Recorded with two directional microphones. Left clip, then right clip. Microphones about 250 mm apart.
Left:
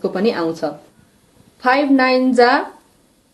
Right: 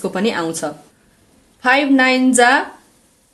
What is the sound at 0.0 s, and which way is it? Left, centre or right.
Speech, right.